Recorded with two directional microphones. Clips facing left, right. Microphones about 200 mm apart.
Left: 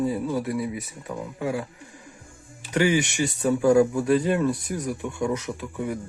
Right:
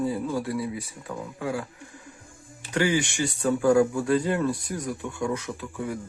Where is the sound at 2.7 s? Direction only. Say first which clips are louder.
Left 2 dB; 20° left (ahead or behind).